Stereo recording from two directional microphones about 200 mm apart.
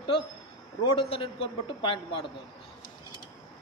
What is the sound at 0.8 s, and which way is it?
A man's voice, 25° left (ahead or behind).